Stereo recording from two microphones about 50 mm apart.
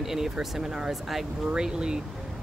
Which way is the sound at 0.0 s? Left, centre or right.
Centre.